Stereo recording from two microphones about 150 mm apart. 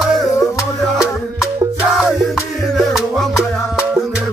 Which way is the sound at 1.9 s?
Centre (ahead or behind).